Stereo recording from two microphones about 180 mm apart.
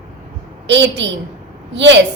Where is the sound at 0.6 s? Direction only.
80° right.